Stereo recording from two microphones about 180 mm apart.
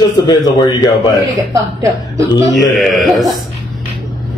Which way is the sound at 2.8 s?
Centre (ahead or behind).